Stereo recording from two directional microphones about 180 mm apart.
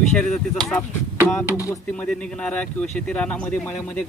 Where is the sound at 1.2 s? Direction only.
15° left (ahead or behind).